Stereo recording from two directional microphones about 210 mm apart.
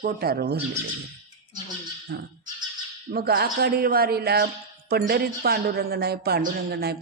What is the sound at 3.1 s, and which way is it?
Speech, 45° right (ahead or behind).